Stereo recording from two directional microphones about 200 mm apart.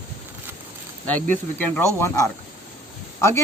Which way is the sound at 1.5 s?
10° left (ahead or behind).